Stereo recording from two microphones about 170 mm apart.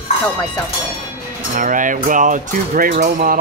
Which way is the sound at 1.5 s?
50° right (ahead or behind).